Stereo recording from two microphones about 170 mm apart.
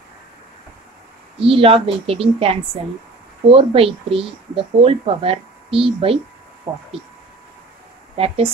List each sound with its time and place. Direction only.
1.4 s speech: 35° right (ahead or behind)
6.7 s speech: 20° right (ahead or behind)